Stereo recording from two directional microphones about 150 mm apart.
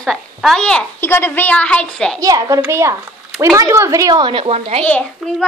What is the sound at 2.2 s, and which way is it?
Speech, 20° right (ahead or behind).